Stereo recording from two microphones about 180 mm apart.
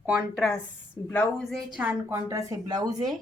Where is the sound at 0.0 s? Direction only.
10° right (ahead or behind).